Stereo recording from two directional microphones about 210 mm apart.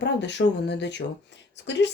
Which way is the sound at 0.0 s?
55° left (ahead or behind).